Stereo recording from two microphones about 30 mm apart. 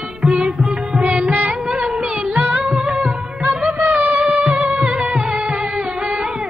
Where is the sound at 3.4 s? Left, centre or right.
Right.